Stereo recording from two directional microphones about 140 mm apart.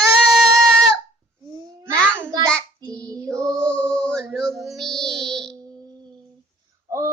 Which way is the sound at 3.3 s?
5° left (ahead or behind).